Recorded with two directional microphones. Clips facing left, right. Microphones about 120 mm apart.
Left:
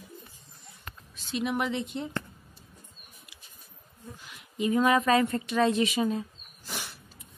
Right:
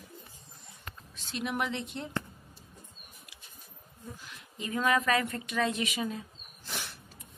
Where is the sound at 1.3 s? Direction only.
Centre (ahead or behind).